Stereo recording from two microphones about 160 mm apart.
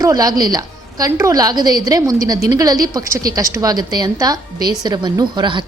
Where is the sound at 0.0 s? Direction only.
25° right (ahead or behind).